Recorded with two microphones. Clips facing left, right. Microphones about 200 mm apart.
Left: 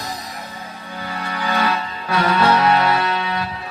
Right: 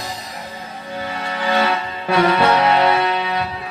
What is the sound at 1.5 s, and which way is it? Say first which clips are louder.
Music: right 2 dB; 25° right (ahead or behind).